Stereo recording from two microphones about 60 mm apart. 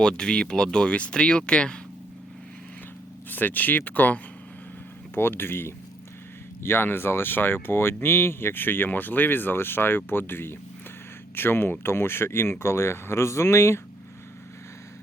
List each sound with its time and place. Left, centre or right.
0.0 s speech: centre
3.2 s speech: left
5.1 s speech: left